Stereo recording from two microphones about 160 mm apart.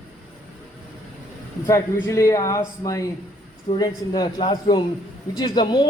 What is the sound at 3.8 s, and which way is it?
A woman's voice, 25° left (ahead or behind).